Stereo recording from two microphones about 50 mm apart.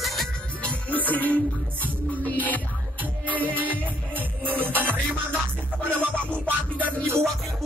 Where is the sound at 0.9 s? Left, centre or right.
Left.